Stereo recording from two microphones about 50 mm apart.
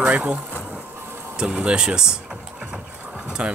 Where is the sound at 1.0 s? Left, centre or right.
Right.